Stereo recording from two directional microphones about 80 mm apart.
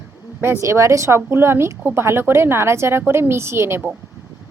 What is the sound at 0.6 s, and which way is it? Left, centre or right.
Speech, right.